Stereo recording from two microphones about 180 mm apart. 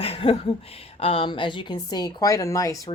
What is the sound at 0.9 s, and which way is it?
Speech, 30° left (ahead or behind).